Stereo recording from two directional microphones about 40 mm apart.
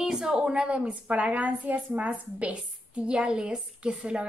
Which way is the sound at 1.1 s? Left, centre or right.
Right.